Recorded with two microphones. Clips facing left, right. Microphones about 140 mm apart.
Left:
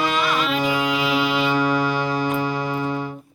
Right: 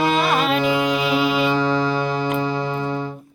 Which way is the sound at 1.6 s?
10° left (ahead or behind).